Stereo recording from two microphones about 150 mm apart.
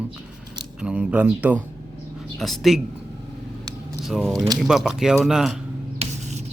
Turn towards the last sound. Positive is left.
turn(degrees=-50)  # may be behind; listen again after turning